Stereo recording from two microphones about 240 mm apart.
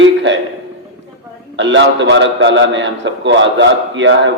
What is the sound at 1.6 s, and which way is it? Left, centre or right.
A man's voice, right.